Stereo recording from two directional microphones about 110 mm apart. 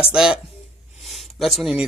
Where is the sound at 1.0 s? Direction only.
Centre (ahead or behind).